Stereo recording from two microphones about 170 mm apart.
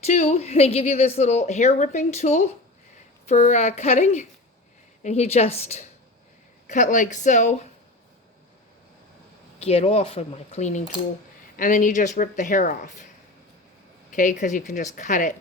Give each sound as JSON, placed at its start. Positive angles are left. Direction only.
{"t": 0.0, "sound": "a woman's voice", "side_deg": 40}
{"t": 9.6, "sound": "a woman's voice", "side_deg": 35}
{"t": 14.2, "sound": "speech", "side_deg": 45}